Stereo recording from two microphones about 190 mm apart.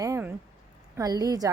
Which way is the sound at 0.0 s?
15° right (ahead or behind).